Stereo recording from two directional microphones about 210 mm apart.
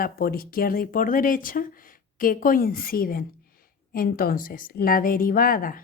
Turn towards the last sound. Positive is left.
turn(degrees=40)  # may be behind; listen again after turning